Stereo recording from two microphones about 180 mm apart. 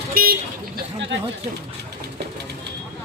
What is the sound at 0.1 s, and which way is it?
Vehicle, 55° right (ahead or behind).